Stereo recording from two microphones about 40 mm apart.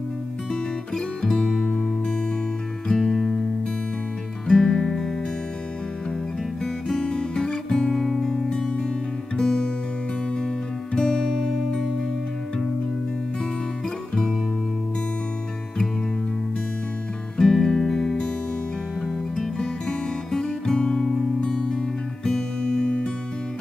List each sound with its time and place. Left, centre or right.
0.9 s music: centre
2.9 s music: centre
4.5 s music: centre
6.6 s guitar: centre
9.4 s music: centre
11.0 s music: centre
17.4 s music: centre
19.3 s music: centre